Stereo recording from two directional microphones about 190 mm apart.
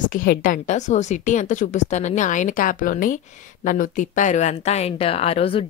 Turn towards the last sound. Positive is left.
turn(degrees=30)  # may be behind; listen again after turning